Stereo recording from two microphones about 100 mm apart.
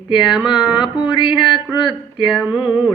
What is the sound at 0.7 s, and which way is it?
Mantra, 50° left (ahead or behind).